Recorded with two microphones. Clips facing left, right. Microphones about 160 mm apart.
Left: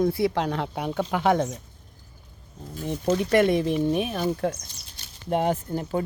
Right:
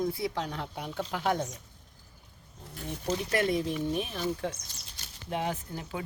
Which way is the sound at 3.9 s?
65° left (ahead or behind).